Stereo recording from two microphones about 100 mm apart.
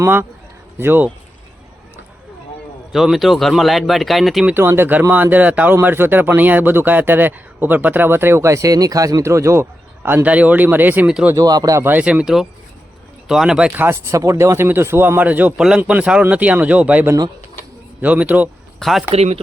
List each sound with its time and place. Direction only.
0.0 s speech: 20° right (ahead or behind)
2.9 s speech: 5° right (ahead or behind)
4.4 s speech: 25° right (ahead or behind)
11.3 s speech: 40° right (ahead or behind)
11.8 s speech: 15° right (ahead or behind)
13.7 s speech: 25° right (ahead or behind)
18.8 s speech: centre (ahead or behind)
19.1 s speech: 90° right